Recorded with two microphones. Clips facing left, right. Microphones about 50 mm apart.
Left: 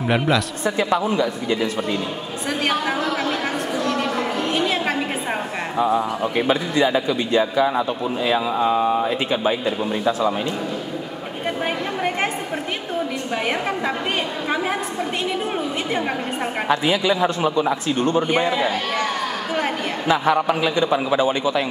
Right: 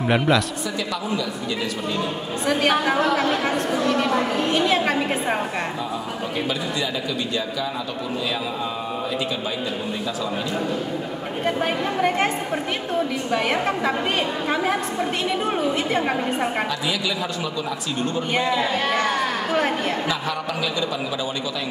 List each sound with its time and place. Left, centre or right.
0.0 s a man's voice: centre
0.7 s a man's voice: left
3.0 s speech: centre
3.8 s a sound: centre
5.8 s a man's voice: left
11.4 s a woman's voice: centre
13.3 s a woman's voice: centre
16.6 s a man's voice: left
18.3 s a man's voice: centre
20.1 s a man's voice: left